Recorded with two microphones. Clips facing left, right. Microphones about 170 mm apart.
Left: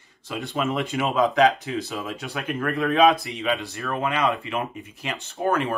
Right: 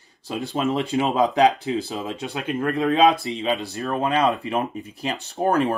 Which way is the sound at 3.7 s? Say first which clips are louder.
Right 4 dB; 35° right (ahead or behind).